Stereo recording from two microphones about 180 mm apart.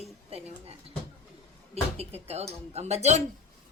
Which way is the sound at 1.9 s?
35° right (ahead or behind).